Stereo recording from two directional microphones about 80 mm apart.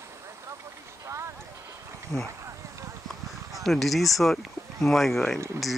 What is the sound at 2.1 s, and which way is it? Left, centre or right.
Speech, left.